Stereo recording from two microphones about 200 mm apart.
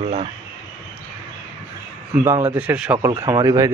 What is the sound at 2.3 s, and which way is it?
Speech, 10° right (ahead or behind).